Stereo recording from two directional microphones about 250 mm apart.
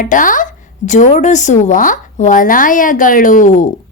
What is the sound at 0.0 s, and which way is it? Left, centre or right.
A woman's voice, left.